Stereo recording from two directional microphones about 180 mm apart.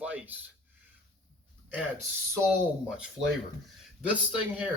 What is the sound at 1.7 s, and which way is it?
Speech, 10° right (ahead or behind).